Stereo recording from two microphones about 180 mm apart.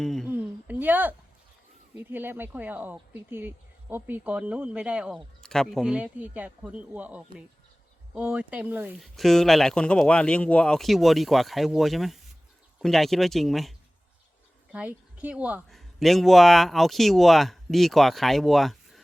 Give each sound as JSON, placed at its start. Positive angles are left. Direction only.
{"t": 0.0, "sound": "speech", "side_deg": 0}
{"t": 0.3, "sound": "a sound", "side_deg": -10}
{"t": 2.0, "sound": "speech", "side_deg": -10}
{"t": 9.1, "sound": "speech", "side_deg": 0}